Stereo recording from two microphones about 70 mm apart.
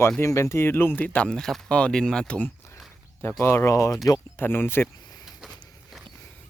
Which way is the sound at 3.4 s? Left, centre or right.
Left.